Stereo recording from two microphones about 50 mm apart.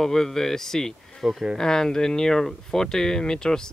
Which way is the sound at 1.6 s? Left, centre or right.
Centre.